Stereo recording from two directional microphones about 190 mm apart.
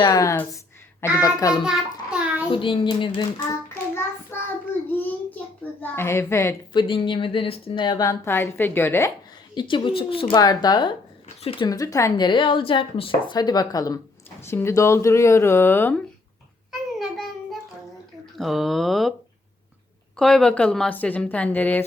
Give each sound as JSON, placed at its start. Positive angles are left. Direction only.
{"t": 0.0, "sound": "a woman's voice", "side_deg": 15}
{"t": 1.6, "sound": "child singing", "side_deg": -5}
{"t": 2.5, "sound": "a woman's voice", "side_deg": 25}
{"t": 4.3, "sound": "child singing", "side_deg": 10}
{"t": 4.9, "sound": "a sound", "side_deg": 10}
{"t": 5.8, "sound": "a woman's voice", "side_deg": 15}
{"t": 9.6, "sound": "a woman's voice", "side_deg": 25}
{"t": 17.0, "sound": "a sound", "side_deg": 0}
{"t": 18.3, "sound": "a woman's voice", "side_deg": 0}
{"t": 20.1, "sound": "a woman's voice", "side_deg": 0}